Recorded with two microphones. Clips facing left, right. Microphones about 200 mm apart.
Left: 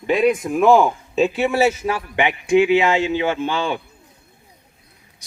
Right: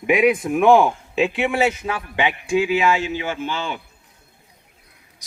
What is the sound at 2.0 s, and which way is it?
Speech, 20° left (ahead or behind).